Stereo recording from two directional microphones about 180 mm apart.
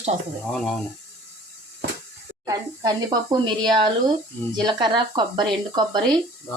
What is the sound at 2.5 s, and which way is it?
Speech, 20° right (ahead or behind).